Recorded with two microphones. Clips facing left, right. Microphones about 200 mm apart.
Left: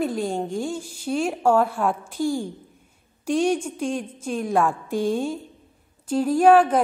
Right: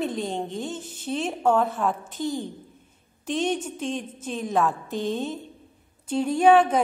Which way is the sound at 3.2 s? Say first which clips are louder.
Left 4 dB; 10° left (ahead or behind).